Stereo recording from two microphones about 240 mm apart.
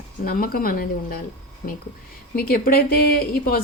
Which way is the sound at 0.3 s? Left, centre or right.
Left.